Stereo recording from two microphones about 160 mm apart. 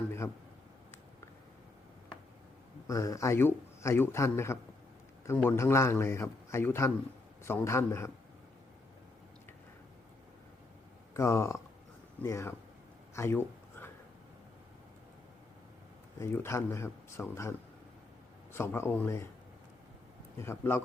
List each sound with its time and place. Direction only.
2.8 s a man's voice: 20° left (ahead or behind)
11.1 s a man's voice: 15° left (ahead or behind)
13.1 s a sound: 15° left (ahead or behind)
16.1 s a man's voice: 15° left (ahead or behind)
18.5 s a man's voice: 15° left (ahead or behind)
20.4 s a man's voice: 15° left (ahead or behind)